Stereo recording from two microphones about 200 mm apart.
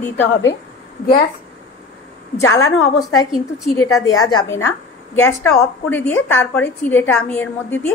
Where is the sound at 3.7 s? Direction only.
15° left (ahead or behind).